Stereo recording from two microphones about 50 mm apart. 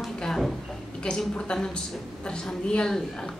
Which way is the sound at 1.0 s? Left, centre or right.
Centre.